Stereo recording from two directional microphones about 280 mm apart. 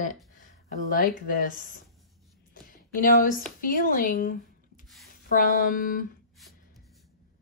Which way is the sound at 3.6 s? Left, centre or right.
Left.